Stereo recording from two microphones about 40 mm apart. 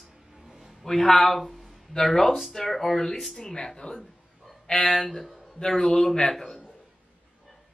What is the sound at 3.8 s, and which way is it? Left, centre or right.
Speech, left.